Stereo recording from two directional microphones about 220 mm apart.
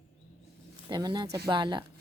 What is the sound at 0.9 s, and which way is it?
Speech, 20° right (ahead or behind).